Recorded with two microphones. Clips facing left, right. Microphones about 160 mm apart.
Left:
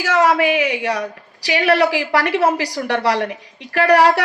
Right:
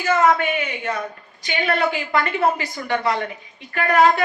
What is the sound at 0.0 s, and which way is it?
A woman's voice, 90° left.